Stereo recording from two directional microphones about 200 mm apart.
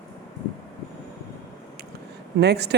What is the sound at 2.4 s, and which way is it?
Speech, 55° right (ahead or behind).